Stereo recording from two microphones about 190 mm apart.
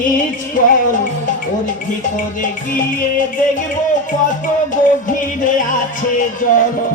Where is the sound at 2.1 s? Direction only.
45° left (ahead or behind).